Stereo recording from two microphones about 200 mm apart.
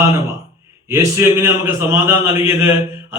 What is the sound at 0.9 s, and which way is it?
A man's voice, 15° right (ahead or behind).